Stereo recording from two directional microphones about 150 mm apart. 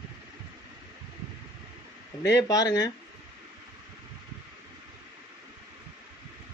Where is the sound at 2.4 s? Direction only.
25° left (ahead or behind).